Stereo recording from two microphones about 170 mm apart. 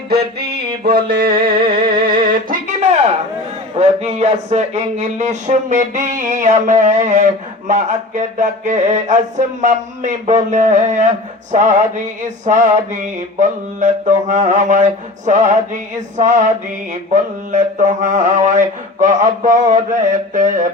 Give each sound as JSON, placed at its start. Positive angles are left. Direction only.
{"t": 0.1, "sound": "music", "side_deg": -65}
{"t": 2.2, "sound": "a sound", "side_deg": -50}
{"t": 3.8, "sound": "mantra", "side_deg": -40}